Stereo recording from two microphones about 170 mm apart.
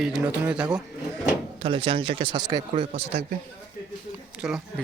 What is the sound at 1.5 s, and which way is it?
A man's voice, 30° right (ahead or behind).